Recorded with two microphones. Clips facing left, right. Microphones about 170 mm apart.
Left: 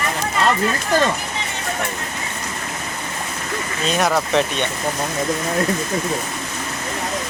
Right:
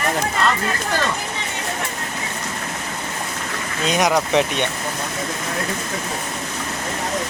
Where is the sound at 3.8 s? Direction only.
15° right (ahead or behind).